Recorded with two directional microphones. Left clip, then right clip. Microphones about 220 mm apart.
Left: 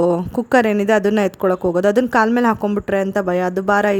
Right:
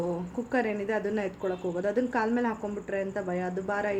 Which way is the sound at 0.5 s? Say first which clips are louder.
Left 14 dB; 50° left (ahead or behind).